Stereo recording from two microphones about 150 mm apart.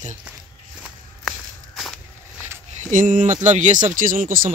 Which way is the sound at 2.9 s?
60° right (ahead or behind).